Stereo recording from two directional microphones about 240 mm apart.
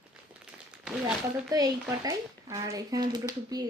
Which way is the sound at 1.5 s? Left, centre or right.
Centre.